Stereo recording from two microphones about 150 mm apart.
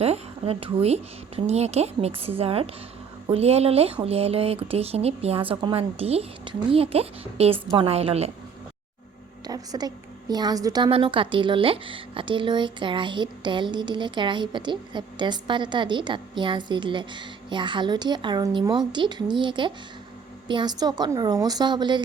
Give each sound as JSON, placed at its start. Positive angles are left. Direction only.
{"t": 0.0, "sound": "a woman's voice", "side_deg": -40}
{"t": 9.5, "sound": "a woman's voice", "side_deg": -25}